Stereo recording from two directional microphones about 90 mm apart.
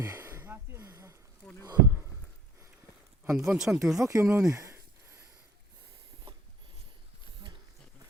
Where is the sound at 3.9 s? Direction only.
35° right (ahead or behind).